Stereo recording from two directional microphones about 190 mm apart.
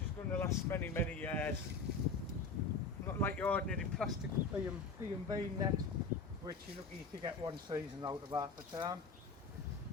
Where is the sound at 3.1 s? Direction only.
10° left (ahead or behind).